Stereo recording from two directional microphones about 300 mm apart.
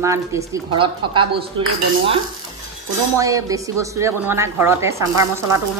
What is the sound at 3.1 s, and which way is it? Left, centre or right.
Speech, centre.